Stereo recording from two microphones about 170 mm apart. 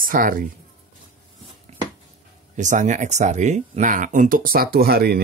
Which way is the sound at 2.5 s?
45° right (ahead or behind).